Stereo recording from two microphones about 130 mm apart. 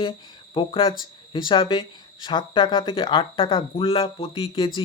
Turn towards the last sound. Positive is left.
turn(degrees=40)  # may be behind; listen again after turning